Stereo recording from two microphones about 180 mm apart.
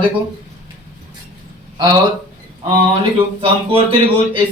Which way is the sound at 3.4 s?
30° right (ahead or behind).